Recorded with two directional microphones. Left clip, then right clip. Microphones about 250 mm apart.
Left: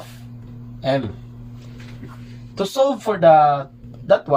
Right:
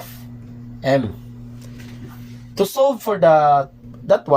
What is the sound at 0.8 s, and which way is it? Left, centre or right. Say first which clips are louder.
Speech: right 3 dB; right.